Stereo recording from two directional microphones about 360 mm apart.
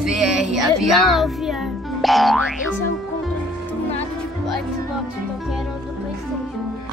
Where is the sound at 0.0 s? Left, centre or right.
Centre.